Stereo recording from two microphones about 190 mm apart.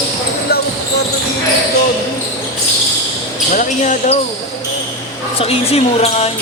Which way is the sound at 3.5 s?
35° left (ahead or behind).